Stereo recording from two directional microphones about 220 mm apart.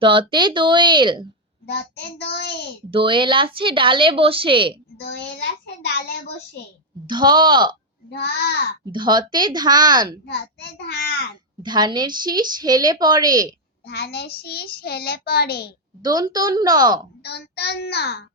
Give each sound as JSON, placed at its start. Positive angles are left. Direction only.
{"t": 0.0, "sound": "a woman's voice", "side_deg": -20}
{"t": 1.6, "sound": "a child's voice", "side_deg": 50}
{"t": 2.9, "sound": "a woman's voice", "side_deg": -25}
{"t": 4.9, "sound": "a child's voice", "side_deg": 50}
{"t": 7.1, "sound": "a woman's voice", "side_deg": -20}
{"t": 8.1, "sound": "a child's voice", "side_deg": 50}
{"t": 8.9, "sound": "a woman's voice", "side_deg": -20}
{"t": 10.2, "sound": "a child's voice", "side_deg": 50}
{"t": 11.6, "sound": "a woman's voice", "side_deg": -20}
{"t": 13.8, "sound": "a child's voice", "side_deg": 45}
{"t": 16.0, "sound": "a woman's voice", "side_deg": -20}
{"t": 17.2, "sound": "a child's voice", "side_deg": 50}